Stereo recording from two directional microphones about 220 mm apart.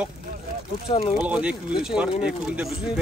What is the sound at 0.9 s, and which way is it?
Speech, 25° left (ahead or behind).